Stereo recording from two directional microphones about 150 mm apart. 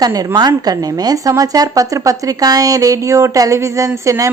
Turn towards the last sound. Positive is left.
turn(degrees=-20)  # may be behind; listen again after turning